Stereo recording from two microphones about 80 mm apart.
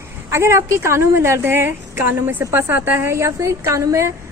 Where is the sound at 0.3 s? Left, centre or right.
Right.